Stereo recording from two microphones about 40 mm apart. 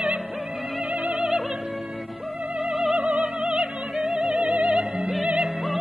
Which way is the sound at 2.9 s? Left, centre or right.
Right.